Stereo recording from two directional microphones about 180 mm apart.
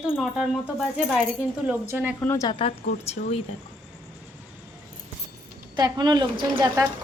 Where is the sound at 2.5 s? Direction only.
30° left (ahead or behind).